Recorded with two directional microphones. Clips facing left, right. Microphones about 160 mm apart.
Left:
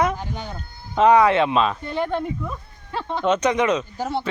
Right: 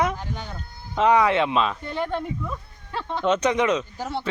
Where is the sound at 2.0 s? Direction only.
Centre (ahead or behind).